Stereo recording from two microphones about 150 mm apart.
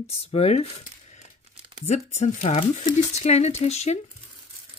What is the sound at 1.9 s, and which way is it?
Speech, 50° left (ahead or behind).